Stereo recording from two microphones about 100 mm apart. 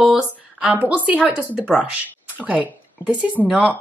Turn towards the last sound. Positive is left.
turn(degrees=-10)  # may be behind; listen again after turning